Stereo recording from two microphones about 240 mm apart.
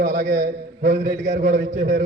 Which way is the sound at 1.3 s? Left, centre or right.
Right.